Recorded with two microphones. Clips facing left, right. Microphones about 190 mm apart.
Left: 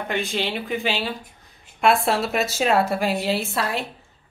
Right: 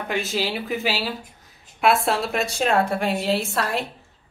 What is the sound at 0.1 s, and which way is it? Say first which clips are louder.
Speech: right 1 dB; 5° right (ahead or behind).